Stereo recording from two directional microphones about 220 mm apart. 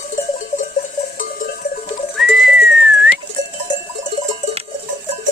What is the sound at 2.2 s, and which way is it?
Whistling, centre (ahead or behind).